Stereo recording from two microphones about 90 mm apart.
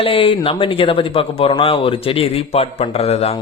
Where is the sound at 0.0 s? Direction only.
85° left.